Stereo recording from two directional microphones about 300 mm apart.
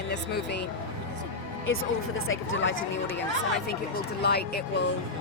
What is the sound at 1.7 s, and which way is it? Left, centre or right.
Speech, left.